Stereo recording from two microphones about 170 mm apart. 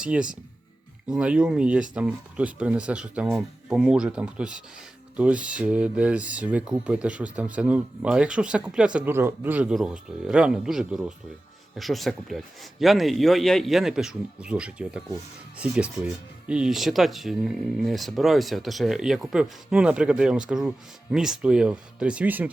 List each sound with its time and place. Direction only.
0.0 s speech: 5° right (ahead or behind)